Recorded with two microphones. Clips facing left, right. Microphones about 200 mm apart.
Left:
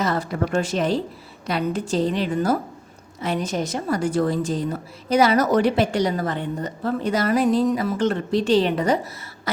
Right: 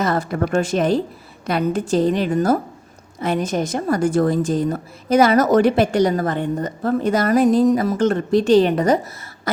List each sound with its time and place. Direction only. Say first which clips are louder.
0.0 s a woman's voice: right 3 dB; 50° right (ahead or behind)